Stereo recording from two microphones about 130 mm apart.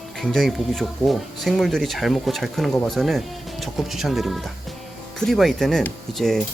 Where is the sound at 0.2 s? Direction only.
Centre (ahead or behind).